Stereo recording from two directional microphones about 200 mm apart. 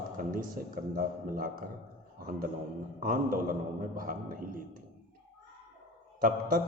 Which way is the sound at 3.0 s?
45° right (ahead or behind).